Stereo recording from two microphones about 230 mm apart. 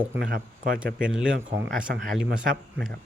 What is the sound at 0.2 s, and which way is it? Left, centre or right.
Speech, right.